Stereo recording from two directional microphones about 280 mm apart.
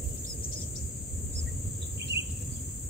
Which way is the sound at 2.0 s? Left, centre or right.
Right.